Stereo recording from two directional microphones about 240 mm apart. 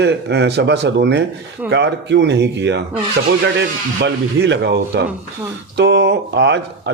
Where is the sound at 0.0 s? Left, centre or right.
Right.